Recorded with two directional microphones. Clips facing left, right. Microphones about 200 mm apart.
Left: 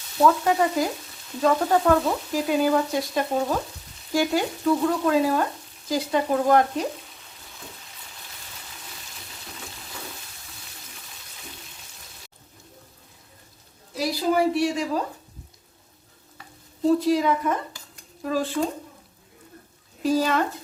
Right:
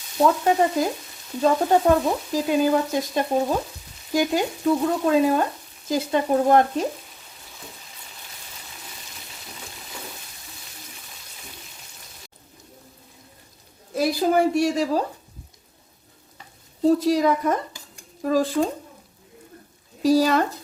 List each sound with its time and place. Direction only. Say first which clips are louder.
0.4 s frying: right 2 dB; 25° right (ahead or behind)
13.9 s a woman's voice: right 3 dB; 50° right (ahead or behind)
17.0 s a woman's voice: right 2 dB; 40° right (ahead or behind)
20.0 s a woman's voice: right 4 dB; 35° right (ahead or behind)